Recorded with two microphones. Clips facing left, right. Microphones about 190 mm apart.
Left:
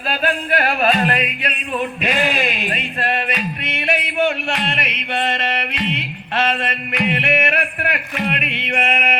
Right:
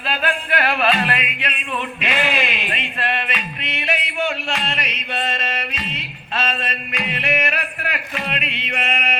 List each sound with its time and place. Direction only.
0.1 s music: 40° left (ahead or behind)